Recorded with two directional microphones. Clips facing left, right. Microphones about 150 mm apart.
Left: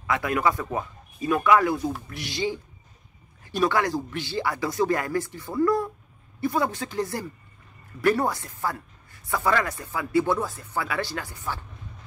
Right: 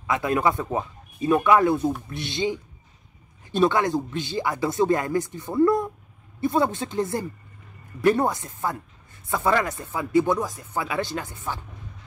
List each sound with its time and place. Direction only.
0.0 s speech: 25° right (ahead or behind)